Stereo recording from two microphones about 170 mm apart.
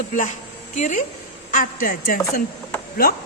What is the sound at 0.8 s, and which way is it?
Speech, 45° left (ahead or behind).